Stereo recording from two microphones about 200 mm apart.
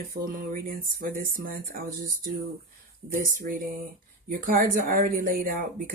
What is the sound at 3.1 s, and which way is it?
A woman's voice, 45° right (ahead or behind).